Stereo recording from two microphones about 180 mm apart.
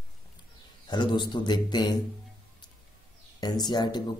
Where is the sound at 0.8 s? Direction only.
25° left (ahead or behind).